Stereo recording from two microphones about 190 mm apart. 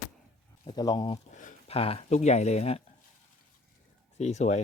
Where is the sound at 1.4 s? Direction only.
45° left (ahead or behind).